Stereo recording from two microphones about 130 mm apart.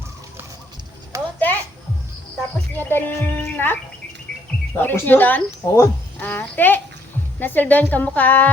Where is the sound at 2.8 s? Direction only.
15° left (ahead or behind).